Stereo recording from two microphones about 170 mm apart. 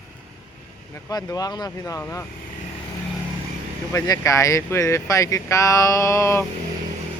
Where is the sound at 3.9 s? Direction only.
20° left (ahead or behind).